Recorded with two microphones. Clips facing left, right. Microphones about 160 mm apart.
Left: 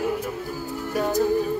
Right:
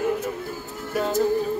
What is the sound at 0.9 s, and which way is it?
Speech, 15° left (ahead or behind).